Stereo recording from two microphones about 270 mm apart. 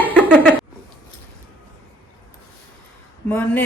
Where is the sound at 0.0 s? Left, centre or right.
Centre.